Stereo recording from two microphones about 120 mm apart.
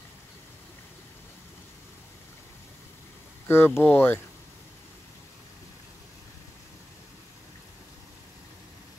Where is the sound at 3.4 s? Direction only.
20° left (ahead or behind).